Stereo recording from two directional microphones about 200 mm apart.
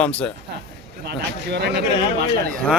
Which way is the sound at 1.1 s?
55° right (ahead or behind).